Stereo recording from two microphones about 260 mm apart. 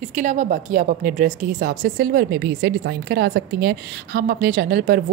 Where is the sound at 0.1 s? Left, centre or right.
Right.